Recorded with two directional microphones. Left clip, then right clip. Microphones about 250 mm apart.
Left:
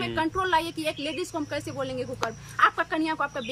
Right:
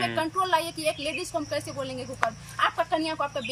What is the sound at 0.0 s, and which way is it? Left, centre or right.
Speech, centre.